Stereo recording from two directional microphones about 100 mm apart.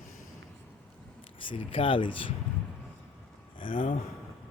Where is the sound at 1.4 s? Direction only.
60° left (ahead or behind).